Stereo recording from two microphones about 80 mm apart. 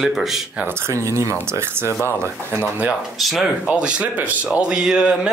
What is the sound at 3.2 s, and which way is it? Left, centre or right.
Speech, centre.